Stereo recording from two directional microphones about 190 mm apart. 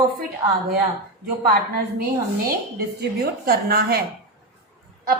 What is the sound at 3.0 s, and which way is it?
A woman's voice, 55° right (ahead or behind).